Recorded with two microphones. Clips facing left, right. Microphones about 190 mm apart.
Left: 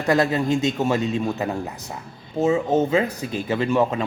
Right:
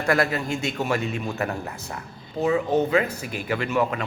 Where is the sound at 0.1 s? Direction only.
20° left (ahead or behind).